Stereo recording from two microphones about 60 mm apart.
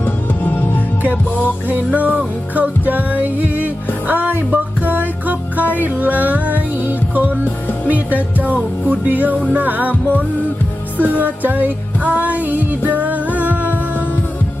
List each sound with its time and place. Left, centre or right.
1.6 s music: right
10.9 s music: left
11.2 s music: right